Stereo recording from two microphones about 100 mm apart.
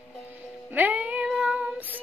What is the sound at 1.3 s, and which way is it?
Child singing, 10° right (ahead or behind).